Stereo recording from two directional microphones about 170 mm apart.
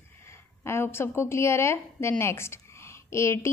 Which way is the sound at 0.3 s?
15° left (ahead or behind).